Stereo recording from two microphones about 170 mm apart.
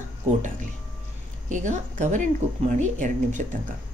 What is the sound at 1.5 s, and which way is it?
Speech, 45° right (ahead or behind).